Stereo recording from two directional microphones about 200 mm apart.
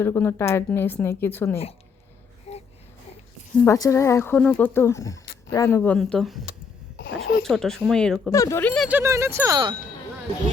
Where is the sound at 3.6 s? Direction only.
15° left (ahead or behind).